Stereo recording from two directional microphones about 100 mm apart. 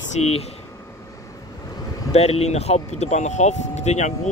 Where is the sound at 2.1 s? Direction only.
90° left.